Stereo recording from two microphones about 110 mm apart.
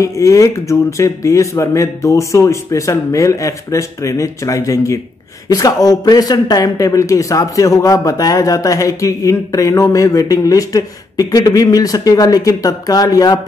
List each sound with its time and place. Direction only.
0.0 s speech: 30° left (ahead or behind)